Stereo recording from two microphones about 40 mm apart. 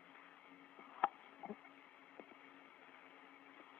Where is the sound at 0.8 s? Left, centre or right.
Left.